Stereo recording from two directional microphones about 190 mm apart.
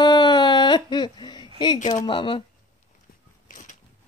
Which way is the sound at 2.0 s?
25° left (ahead or behind).